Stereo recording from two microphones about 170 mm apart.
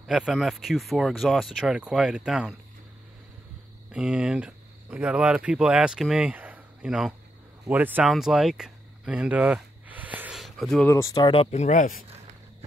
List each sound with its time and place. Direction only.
0.0 s speech: centre (ahead or behind)
3.9 s speech: 5° right (ahead or behind)
10.9 s speech: 20° left (ahead or behind)
11.3 s speech: 45° left (ahead or behind)